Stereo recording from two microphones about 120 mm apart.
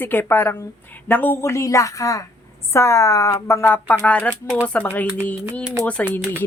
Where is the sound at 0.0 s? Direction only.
15° left (ahead or behind).